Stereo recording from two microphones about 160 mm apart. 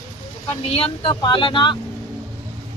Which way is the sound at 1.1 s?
25° left (ahead or behind).